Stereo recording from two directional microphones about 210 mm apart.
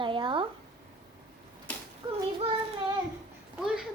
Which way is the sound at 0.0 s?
25° right (ahead or behind).